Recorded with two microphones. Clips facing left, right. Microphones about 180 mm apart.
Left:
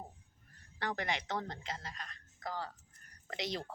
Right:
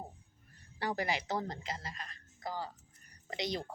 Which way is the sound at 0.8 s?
10° right (ahead or behind).